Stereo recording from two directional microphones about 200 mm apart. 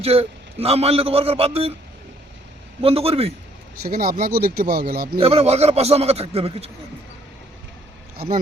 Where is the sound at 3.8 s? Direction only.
50° right (ahead or behind).